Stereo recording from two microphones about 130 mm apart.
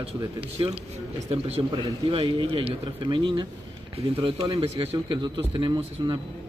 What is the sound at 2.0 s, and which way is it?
Speech, 40° right (ahead or behind).